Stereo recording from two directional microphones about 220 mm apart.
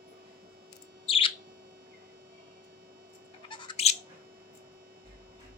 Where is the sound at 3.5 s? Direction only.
20° left (ahead or behind).